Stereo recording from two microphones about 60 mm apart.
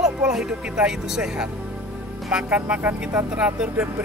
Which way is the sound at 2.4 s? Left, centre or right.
Right.